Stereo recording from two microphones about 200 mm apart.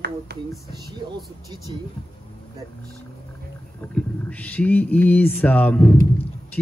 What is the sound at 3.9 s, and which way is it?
Speech, 5° left (ahead or behind).